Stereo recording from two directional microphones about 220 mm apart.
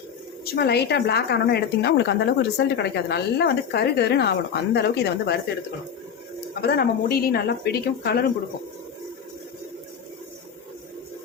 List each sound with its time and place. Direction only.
0.4 s speech: 45° left (ahead or behind)
6.6 s speech: 45° left (ahead or behind)